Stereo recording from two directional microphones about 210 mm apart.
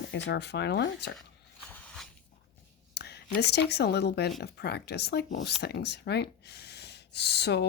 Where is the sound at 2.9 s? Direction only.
50° left (ahead or behind).